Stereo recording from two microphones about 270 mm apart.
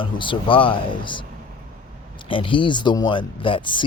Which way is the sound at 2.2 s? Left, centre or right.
Centre.